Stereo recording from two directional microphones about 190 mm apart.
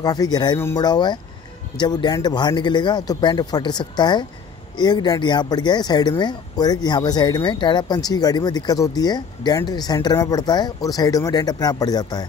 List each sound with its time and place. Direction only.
0.0 s speech: 20° left (ahead or behind)